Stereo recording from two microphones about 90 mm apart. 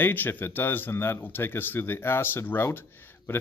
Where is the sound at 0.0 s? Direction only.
20° left (ahead or behind).